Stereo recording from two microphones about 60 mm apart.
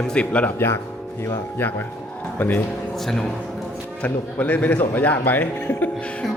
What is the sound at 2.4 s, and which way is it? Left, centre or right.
Speech, left.